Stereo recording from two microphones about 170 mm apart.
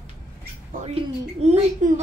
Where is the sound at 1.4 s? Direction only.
40° right (ahead or behind).